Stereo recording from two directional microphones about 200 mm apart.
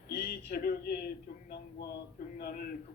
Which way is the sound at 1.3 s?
45° left (ahead or behind).